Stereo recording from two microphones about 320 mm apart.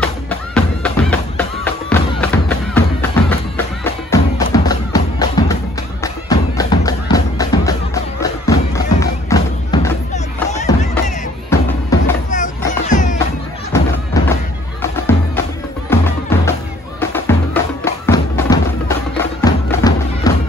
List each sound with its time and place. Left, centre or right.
0.0 s music: centre
10.1 s music: left
11.5 s music: centre
12.3 s music: left
14.2 s thump: centre
14.8 s music: centre